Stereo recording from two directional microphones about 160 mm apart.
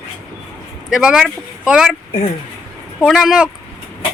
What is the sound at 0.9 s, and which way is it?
Speech, 5° right (ahead or behind).